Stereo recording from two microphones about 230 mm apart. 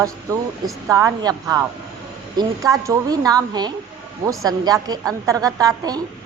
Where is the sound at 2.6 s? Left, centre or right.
Centre.